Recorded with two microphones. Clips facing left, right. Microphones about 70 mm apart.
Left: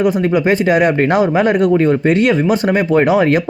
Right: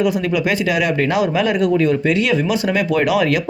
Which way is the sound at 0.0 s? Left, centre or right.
Left.